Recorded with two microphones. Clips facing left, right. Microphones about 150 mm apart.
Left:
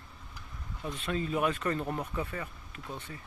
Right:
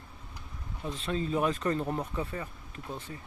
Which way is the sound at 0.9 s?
30° right (ahead or behind).